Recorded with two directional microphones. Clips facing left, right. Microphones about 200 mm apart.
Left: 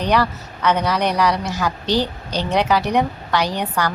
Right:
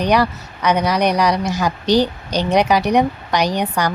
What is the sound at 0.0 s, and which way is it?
Speech, 15° right (ahead or behind).